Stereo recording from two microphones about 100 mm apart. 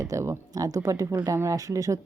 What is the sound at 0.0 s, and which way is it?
Speech, 30° right (ahead or behind).